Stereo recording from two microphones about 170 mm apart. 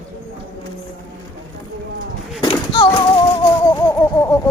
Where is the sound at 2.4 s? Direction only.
30° left (ahead or behind).